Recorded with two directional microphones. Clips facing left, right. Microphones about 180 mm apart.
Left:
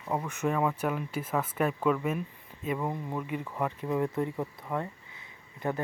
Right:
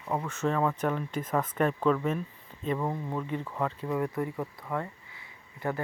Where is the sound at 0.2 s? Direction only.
15° left (ahead or behind).